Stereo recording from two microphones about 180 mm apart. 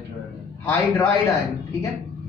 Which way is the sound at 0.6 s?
15° left (ahead or behind).